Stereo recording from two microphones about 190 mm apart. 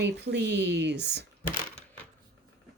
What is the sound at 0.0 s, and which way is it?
A woman's voice, 60° right (ahead or behind).